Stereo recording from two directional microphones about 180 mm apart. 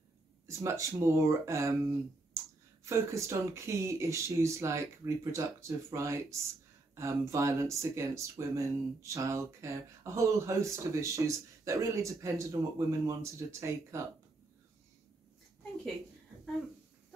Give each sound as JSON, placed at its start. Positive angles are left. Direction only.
{"t": 0.5, "sound": "speech", "side_deg": -15}
{"t": 2.8, "sound": "speech", "side_deg": -15}